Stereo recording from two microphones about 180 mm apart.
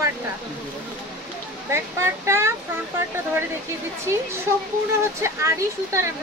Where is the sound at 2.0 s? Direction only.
15° right (ahead or behind).